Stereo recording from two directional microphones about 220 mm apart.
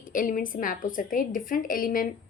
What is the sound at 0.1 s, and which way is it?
A woman's voice, 40° left (ahead or behind).